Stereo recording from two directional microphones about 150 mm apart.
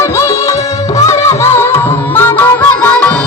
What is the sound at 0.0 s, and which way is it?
Music, 20° left (ahead or behind).